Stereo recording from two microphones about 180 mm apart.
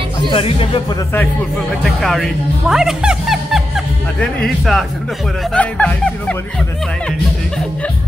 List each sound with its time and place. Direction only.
0.3 s speech: 30° left (ahead or behind)
1.9 s speech: centre (ahead or behind)